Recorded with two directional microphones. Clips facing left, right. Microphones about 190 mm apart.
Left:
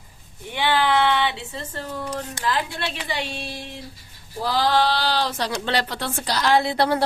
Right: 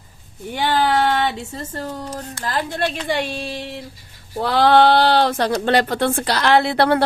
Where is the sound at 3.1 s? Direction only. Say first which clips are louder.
Right 6 dB; 60° right (ahead or behind).